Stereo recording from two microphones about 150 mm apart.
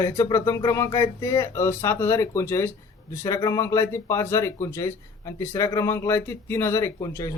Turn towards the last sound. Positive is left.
turn(degrees=25)  # may be behind; listen again after turning